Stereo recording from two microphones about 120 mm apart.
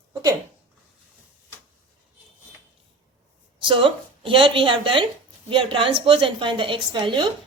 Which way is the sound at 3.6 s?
45° right (ahead or behind).